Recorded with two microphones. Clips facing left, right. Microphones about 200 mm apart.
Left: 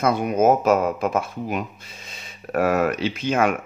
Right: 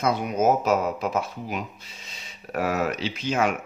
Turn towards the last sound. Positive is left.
turn(degrees=55)  # may be behind; listen again after turning